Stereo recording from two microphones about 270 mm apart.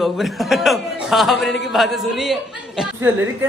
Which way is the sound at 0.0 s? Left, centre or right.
Centre.